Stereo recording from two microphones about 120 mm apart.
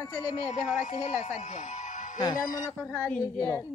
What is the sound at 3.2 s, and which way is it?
Speech, 20° left (ahead or behind).